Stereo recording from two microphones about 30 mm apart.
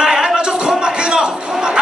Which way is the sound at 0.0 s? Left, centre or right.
Right.